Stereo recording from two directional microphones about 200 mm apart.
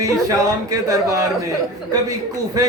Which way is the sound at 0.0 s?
15° right (ahead or behind).